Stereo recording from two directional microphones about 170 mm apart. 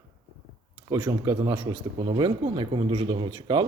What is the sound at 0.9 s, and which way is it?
Speech, 20° right (ahead or behind).